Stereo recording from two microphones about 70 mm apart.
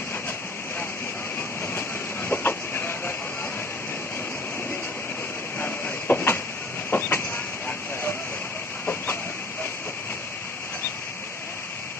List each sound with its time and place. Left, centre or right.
1.7 s train: left
5.6 s train: left
6.9 s vehicle: left
8.8 s chicken: left